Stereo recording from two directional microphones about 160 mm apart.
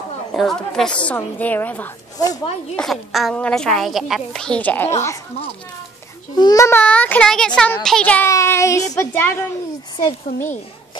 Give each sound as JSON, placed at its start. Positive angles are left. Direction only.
{"t": 0.3, "sound": "a child's voice", "side_deg": 0}
{"t": 2.1, "sound": "speech", "side_deg": 25}
{"t": 2.7, "sound": "a woman's voice", "side_deg": 0}
{"t": 6.3, "sound": "a child's voice", "side_deg": 25}